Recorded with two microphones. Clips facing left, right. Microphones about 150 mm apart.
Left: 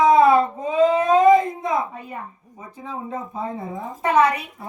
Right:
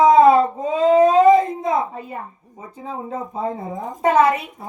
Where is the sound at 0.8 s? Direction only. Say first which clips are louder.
Right 3 dB; 30° right (ahead or behind).